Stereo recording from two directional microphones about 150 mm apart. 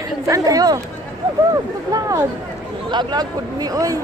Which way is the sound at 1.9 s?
20° right (ahead or behind).